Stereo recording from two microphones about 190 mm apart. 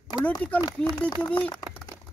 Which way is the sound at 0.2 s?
10° left (ahead or behind).